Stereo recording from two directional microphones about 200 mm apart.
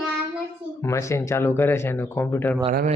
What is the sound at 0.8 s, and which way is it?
Mantra, 15° left (ahead or behind).